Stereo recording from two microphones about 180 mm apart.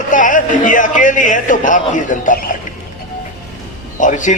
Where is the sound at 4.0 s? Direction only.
45° left (ahead or behind).